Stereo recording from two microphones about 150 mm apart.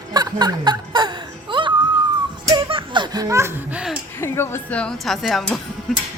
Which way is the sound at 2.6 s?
35° right (ahead or behind).